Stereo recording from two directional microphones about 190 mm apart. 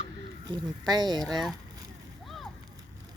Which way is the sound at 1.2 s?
Centre (ahead or behind).